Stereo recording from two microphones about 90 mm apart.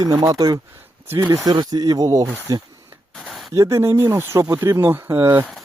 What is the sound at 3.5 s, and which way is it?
Speech, 30° right (ahead or behind).